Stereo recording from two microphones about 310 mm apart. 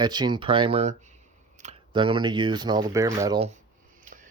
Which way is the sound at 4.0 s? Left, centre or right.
Right.